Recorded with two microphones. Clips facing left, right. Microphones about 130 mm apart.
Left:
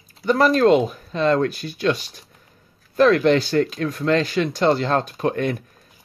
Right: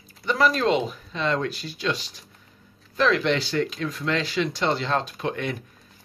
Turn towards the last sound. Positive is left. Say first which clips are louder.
# left 6 dB
turn(degrees=45)  # may be behind; listen again after turning